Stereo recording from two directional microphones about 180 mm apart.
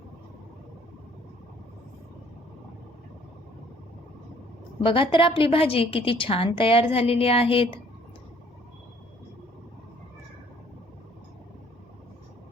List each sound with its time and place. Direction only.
4.8 s a woman's voice: 30° left (ahead or behind)